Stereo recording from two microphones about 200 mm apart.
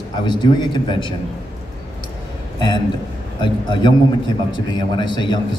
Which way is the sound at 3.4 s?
25° left (ahead or behind).